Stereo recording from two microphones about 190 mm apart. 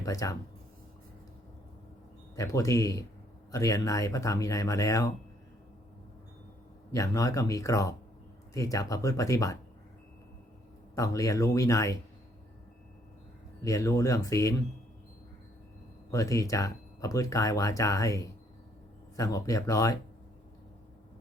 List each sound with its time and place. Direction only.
0.0 s speech: 15° left (ahead or behind)
2.3 s speech: 15° left (ahead or behind)
6.9 s speech: 15° left (ahead or behind)
10.9 s speech: 15° left (ahead or behind)
13.6 s speech: 15° left (ahead or behind)
16.1 s speech: 15° left (ahead or behind)